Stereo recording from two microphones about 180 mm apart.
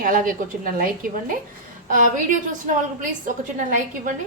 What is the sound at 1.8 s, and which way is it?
A woman's voice, 45° right (ahead or behind).